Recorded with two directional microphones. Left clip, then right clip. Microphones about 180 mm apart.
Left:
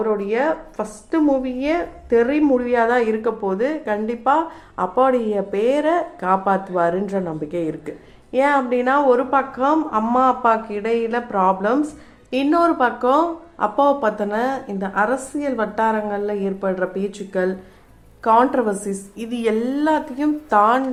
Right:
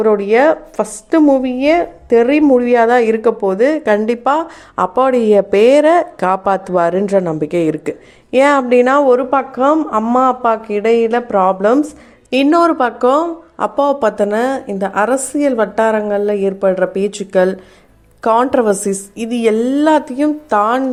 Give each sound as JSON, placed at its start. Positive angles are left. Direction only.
{"t": 0.0, "sound": "a woman's voice", "side_deg": -60}